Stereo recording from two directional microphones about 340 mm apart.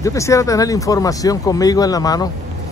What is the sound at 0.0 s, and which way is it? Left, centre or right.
Speech, centre.